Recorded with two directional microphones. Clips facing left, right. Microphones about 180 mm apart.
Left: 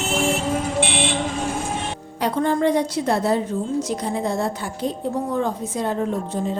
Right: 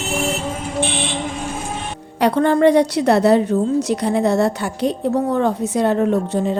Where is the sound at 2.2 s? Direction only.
70° right (ahead or behind).